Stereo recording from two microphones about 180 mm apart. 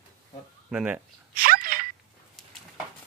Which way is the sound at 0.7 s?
5° right (ahead or behind).